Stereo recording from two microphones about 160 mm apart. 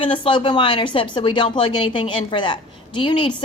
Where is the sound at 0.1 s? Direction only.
30° left (ahead or behind).